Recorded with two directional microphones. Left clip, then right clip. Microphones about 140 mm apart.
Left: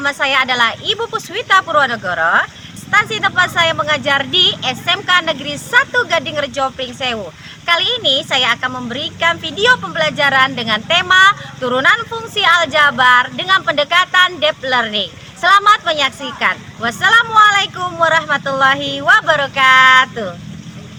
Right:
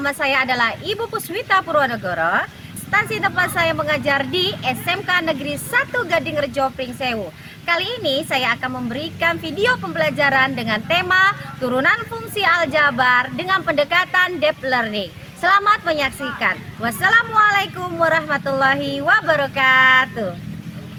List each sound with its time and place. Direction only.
0.0 s a woman's voice: 30° right (ahead or behind)